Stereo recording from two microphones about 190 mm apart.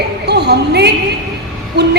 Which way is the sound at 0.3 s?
60° right (ahead or behind).